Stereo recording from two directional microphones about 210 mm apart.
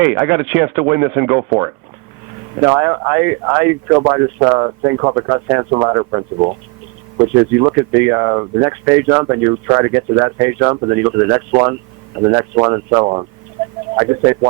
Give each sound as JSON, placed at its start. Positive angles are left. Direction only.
{"t": 0.0, "sound": "speech", "side_deg": -10}